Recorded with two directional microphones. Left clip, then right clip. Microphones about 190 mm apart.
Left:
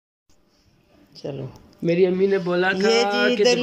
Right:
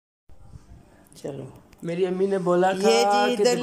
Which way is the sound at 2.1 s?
10° right (ahead or behind).